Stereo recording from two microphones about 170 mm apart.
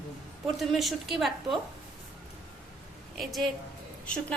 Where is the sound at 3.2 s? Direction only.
Centre (ahead or behind).